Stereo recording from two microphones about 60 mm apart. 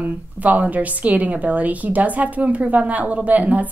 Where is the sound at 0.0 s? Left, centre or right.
Right.